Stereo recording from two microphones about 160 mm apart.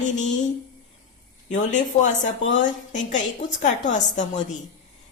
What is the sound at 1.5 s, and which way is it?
Speech, 50° left (ahead or behind).